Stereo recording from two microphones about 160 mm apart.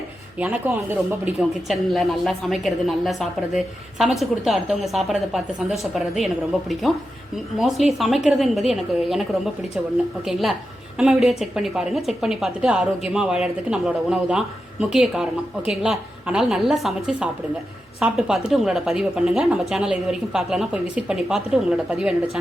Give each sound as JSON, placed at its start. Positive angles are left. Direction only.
{"t": 0.3, "sound": "speech", "side_deg": -10}
{"t": 7.6, "sound": "speech", "side_deg": 0}
{"t": 10.9, "sound": "speech", "side_deg": -5}